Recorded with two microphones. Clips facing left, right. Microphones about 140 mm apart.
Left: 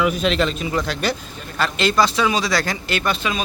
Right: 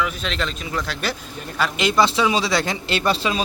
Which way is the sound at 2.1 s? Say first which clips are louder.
Even; 25° right (ahead or behind).